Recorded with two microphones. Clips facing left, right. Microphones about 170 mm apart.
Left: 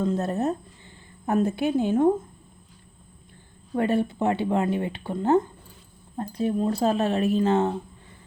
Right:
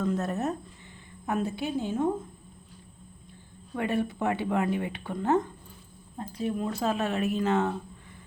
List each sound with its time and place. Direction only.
0.0 s speech: 30° left (ahead or behind)
1.3 s a woman's voice: 50° left (ahead or behind)
3.8 s speech: 30° left (ahead or behind)